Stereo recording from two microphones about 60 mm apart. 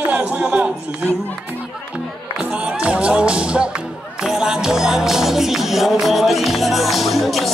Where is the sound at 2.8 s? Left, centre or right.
Centre.